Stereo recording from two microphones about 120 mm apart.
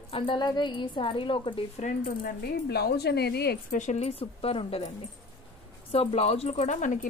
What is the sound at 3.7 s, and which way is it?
Speech, 75° left (ahead or behind).